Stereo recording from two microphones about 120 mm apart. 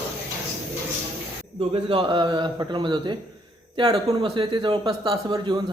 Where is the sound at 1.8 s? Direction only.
45° right (ahead or behind).